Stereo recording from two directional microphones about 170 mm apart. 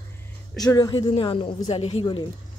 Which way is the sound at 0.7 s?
20° left (ahead or behind).